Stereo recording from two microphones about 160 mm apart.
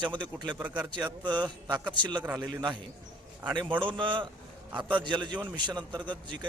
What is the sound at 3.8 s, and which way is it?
A man's voice, 30° right (ahead or behind).